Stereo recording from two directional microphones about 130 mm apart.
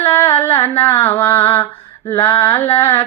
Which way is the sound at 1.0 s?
15° left (ahead or behind).